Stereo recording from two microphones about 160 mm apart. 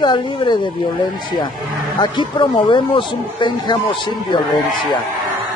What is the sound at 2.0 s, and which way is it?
Speech, 30° left (ahead or behind).